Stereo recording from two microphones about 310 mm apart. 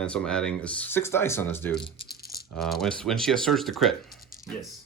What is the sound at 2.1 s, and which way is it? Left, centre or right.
Rattle, left.